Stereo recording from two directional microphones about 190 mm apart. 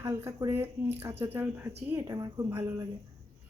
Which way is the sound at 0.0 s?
15° right (ahead or behind).